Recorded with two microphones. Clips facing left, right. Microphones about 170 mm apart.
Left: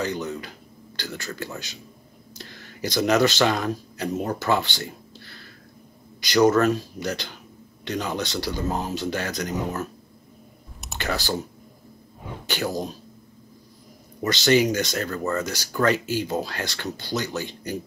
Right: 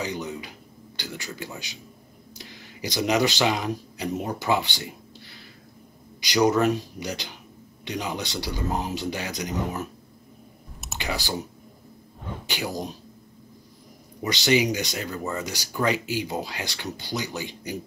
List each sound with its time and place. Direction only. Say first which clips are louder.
0.0 s speech: left 3 dB; 15° right (ahead or behind)
11.0 s speech: left 3 dB; 15° right (ahead or behind)
12.4 s speech: left 4 dB; 15° right (ahead or behind)
14.2 s speech: left 3 dB; 15° right (ahead or behind)